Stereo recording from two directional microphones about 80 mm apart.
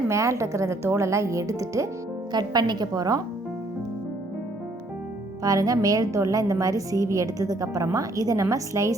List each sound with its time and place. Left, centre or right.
0.1 s speech: right
2.3 s a woman's voice: right
5.4 s a woman's voice: right